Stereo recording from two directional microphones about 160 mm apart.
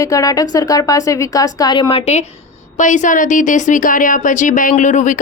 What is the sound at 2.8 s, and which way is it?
Speech, 50° left (ahead or behind).